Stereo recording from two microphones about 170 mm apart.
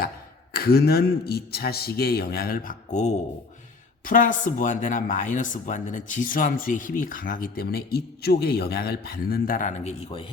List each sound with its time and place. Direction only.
0.5 s a man's voice: 65° left (ahead or behind); by 10.2 s 40° left (ahead or behind)